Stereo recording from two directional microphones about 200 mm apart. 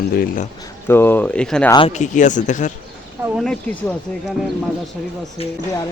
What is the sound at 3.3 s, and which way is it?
Speech, 5° left (ahead or behind).